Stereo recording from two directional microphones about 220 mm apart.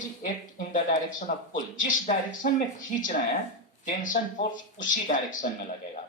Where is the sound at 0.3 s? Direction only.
35° left (ahead or behind).